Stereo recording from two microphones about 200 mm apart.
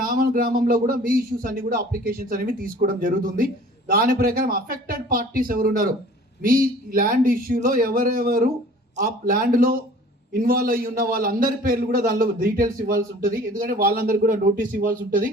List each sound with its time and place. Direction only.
0.0 s speech: 45° right (ahead or behind)